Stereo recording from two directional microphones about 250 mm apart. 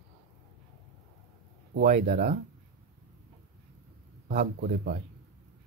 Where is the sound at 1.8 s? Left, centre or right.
Right.